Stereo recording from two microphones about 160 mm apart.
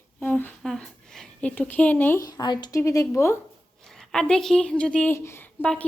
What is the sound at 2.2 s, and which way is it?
Speech, 25° left (ahead or behind).